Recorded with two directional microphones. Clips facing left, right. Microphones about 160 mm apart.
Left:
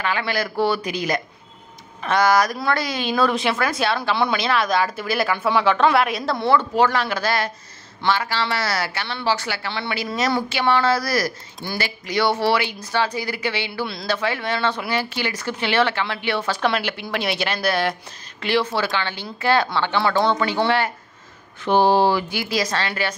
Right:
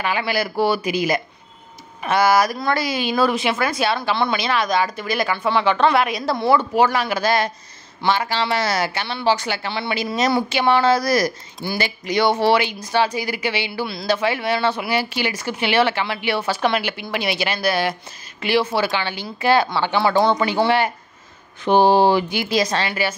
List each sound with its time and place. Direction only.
0.0 s speech: 10° right (ahead or behind)
6.5 s speech: 10° right (ahead or behind)
22.8 s speech: 10° right (ahead or behind)